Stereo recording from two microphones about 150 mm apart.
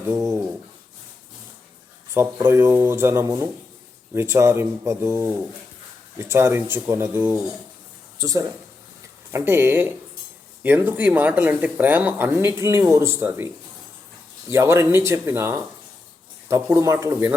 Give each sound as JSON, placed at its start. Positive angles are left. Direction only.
{"t": 0.1, "sound": "a sound", "side_deg": -20}
{"t": 2.1, "sound": "speech", "side_deg": -15}
{"t": 14.5, "sound": "speech", "side_deg": -20}